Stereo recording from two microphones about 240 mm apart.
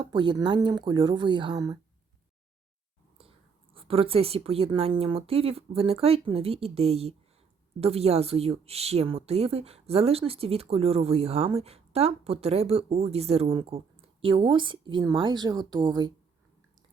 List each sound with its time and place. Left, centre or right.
0.0 s a woman's voice: centre
3.8 s a woman's voice: right